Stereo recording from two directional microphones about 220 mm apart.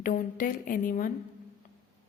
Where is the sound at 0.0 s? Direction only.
40° left (ahead or behind).